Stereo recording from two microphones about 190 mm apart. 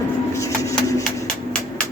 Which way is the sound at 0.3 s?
15° left (ahead or behind).